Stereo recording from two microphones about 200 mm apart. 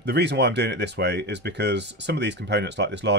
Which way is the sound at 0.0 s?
55° right (ahead or behind).